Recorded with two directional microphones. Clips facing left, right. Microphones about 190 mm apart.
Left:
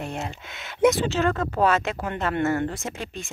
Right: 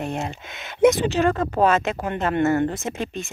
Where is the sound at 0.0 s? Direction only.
20° right (ahead or behind).